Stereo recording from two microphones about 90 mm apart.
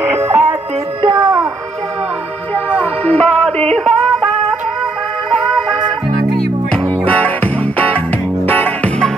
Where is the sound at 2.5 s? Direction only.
15° left (ahead or behind).